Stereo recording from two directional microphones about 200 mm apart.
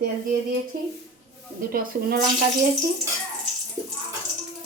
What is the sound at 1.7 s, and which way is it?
Speech, 50° right (ahead or behind).